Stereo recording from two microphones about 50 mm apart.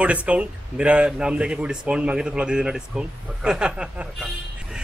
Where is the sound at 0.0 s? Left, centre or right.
Right.